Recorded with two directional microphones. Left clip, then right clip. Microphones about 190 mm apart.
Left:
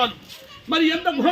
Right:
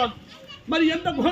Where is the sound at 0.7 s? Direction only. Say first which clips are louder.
Left 2 dB; 40° left (ahead or behind).